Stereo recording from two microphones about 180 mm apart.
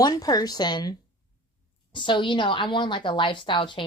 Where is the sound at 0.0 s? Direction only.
20° left (ahead or behind).